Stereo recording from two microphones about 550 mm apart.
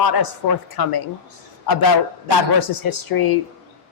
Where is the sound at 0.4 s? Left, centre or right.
Left.